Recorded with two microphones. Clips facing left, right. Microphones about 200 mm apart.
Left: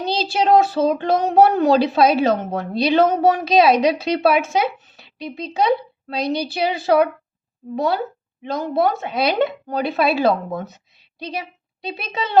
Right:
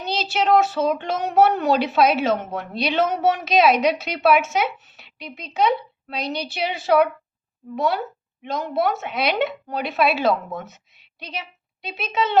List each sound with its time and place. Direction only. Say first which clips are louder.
0.0 s speech: left 3 dB; 35° left (ahead or behind)